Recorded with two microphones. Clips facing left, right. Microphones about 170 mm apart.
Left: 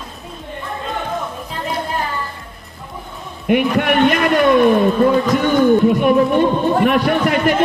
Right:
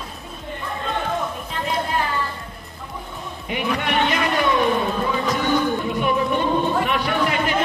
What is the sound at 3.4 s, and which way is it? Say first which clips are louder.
A man's voice: left 9 dB; 55° left (ahead or behind).